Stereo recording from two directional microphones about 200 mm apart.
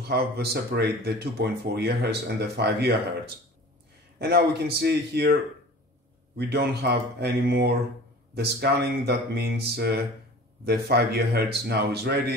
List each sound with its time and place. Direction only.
0.1 s speech: 55° right (ahead or behind)
4.2 s a man's voice: 55° right (ahead or behind)